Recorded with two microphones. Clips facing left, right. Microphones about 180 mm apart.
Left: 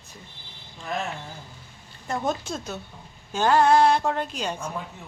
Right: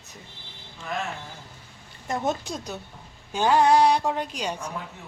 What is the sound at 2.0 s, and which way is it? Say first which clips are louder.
Speech: even; 15° right (ahead or behind).